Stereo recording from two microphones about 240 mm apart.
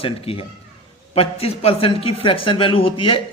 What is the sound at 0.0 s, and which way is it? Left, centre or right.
A man's voice, left.